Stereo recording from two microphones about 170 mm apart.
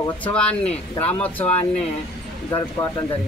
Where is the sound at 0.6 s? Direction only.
40° left (ahead or behind).